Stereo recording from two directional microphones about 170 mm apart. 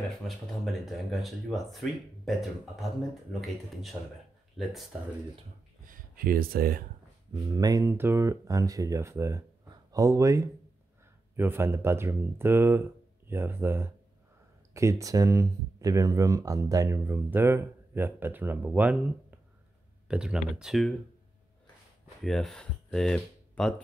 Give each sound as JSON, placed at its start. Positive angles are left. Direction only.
{"t": 0.5, "sound": "speech", "side_deg": 0}
{"t": 5.9, "sound": "speech", "side_deg": -60}
{"t": 7.5, "sound": "speech", "side_deg": -20}
{"t": 22.2, "sound": "speech", "side_deg": 0}